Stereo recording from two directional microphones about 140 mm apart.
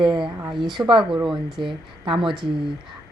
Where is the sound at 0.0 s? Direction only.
35° right (ahead or behind).